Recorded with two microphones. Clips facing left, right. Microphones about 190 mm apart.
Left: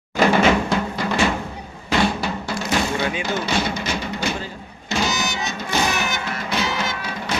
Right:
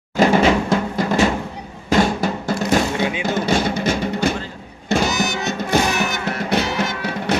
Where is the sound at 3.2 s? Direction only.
50° right (ahead or behind).